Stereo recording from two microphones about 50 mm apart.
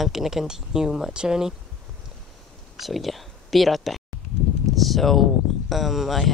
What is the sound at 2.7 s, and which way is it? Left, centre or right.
Speech, centre.